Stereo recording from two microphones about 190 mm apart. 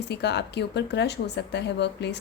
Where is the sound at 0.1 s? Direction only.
60° left (ahead or behind).